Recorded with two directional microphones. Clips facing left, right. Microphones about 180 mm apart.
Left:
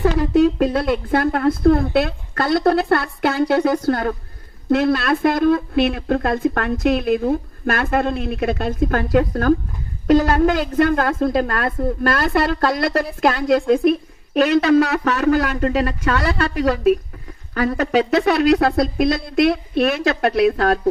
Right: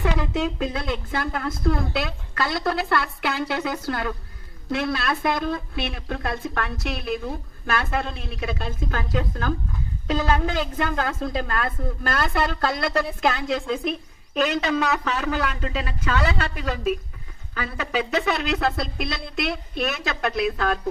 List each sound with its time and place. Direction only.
0.3 s speech: 60° left (ahead or behind)
15.2 s speech: 45° left (ahead or behind)